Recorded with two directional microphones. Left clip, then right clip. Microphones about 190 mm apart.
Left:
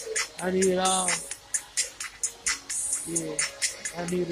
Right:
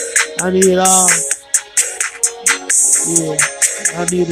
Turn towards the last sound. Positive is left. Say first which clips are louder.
# right 14 dB
turn(degrees=-40)  # may be behind; listen again after turning